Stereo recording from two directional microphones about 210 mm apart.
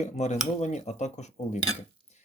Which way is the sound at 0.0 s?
35° left (ahead or behind).